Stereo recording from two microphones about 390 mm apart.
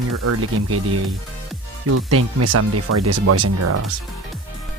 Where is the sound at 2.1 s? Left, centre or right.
Right.